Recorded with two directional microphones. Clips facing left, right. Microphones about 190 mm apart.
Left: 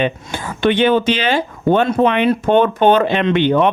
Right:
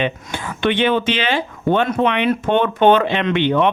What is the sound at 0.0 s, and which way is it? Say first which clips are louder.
Speech: left 3 dB; 40° left (ahead or behind).